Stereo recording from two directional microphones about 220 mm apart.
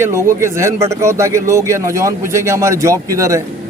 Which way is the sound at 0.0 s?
10° right (ahead or behind).